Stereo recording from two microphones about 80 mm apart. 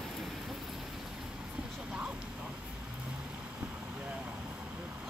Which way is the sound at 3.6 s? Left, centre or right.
Centre.